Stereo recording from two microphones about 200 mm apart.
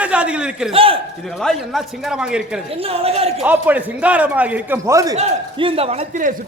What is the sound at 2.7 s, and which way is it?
Speech, 30° right (ahead or behind).